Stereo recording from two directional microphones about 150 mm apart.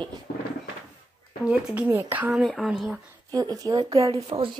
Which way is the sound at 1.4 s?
5° right (ahead or behind).